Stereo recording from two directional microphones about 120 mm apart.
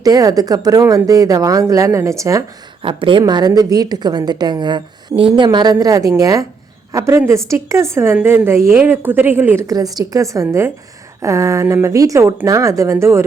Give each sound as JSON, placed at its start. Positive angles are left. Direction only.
{"t": 0.0, "sound": "speech", "side_deg": -30}
{"t": 2.8, "sound": "a woman's voice", "side_deg": -45}
{"t": 9.6, "sound": "speech", "side_deg": -30}